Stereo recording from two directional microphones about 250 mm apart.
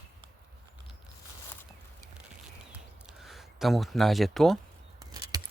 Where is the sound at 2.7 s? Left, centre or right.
Centre.